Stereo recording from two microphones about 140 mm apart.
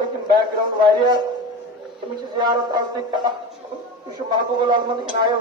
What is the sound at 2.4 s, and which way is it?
Speech, 30° right (ahead or behind).